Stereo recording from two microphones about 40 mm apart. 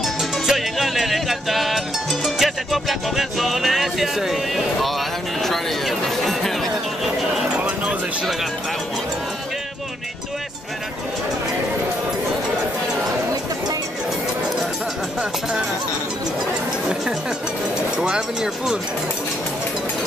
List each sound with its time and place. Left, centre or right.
0.2 s music: centre
7.5 s music: right
17.9 s speech: centre